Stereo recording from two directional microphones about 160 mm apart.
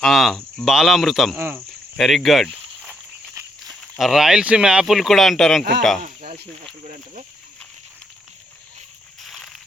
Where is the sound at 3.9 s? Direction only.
Centre (ahead or behind).